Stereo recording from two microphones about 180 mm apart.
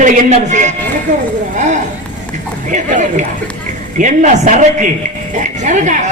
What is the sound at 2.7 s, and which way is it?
Speech, 45° right (ahead or behind).